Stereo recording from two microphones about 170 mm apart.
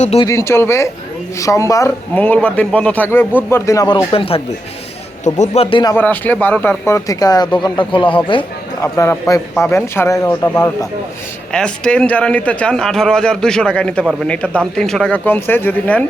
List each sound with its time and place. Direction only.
0.0 s speech: 40° left (ahead or behind)
0.3 s a man's voice: 15° left (ahead or behind)
4.1 s speech: 35° left (ahead or behind)
6.0 s a man's voice: 10° left (ahead or behind); by 8.9 s 30° left (ahead or behind)
9.0 s a man's voice: 20° left (ahead or behind)
11.5 s a man's voice: 5° left (ahead or behind)